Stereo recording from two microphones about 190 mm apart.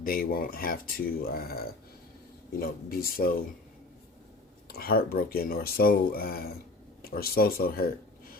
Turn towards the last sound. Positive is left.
turn(degrees=50)  # may be behind; listen again after turning